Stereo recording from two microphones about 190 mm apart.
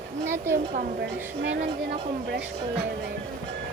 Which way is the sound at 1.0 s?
65° right (ahead or behind).